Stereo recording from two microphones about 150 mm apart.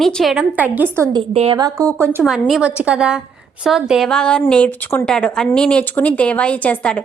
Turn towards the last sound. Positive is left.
turn(degrees=10)  # may be behind; listen again after turning